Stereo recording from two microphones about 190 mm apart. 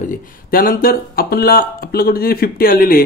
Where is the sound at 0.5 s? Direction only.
50° left (ahead or behind).